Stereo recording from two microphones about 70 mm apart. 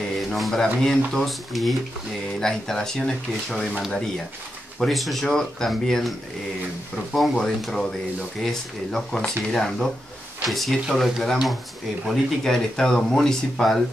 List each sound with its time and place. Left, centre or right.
0.3 s speech: centre
7.2 s speech: centre